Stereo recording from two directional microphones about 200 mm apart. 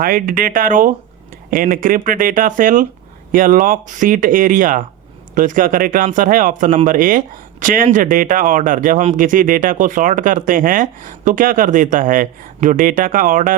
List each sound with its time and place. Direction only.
0.0 s speech: 45° right (ahead or behind)